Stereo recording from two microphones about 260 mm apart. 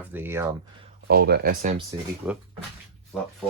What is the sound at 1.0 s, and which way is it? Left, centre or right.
Speech, right.